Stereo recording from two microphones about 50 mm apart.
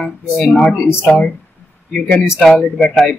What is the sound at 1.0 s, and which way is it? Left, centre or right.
Speech, left.